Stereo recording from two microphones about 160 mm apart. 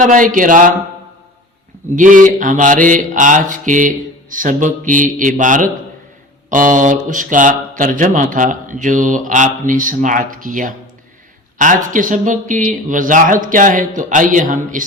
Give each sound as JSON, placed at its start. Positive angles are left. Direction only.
{"t": 0.0, "sound": "speech", "side_deg": -55}
{"t": 2.0, "sound": "mantra", "side_deg": -55}
{"t": 6.5, "sound": "speech", "side_deg": -55}